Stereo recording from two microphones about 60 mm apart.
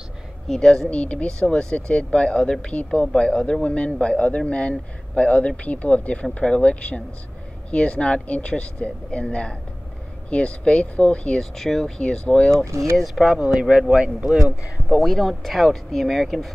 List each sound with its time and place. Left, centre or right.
0.5 s speech: centre
0.8 s speech: left
11.5 s speech: centre
12.0 s speech: centre
12.9 s speech: centre
13.6 s a man's voice: centre
15.0 s speech: centre